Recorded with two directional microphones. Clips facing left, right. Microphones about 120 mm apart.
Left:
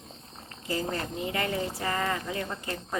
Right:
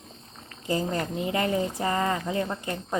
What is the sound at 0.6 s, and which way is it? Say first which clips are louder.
Speech: right 4 dB; 25° right (ahead or behind).